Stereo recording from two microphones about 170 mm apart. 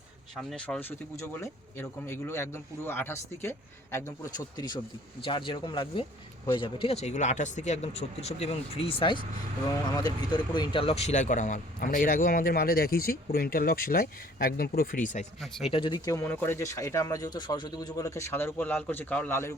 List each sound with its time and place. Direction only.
0.3 s a man's voice: 5° left (ahead or behind); by 15.3 s 50° left (ahead or behind)
15.6 s speech: 30° left (ahead or behind); by 19.5 s 15° left (ahead or behind)